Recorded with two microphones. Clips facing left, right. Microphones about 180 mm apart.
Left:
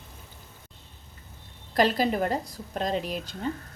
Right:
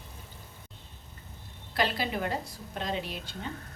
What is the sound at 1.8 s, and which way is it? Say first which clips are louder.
A woman's voice: left 7 dB; 40° left (ahead or behind).